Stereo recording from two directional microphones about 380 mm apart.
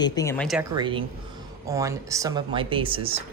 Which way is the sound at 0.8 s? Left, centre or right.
Centre.